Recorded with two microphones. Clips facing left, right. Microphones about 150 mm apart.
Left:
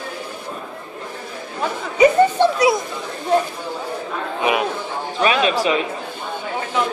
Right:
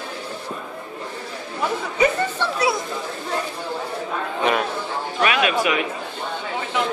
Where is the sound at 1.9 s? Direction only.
15° left (ahead or behind).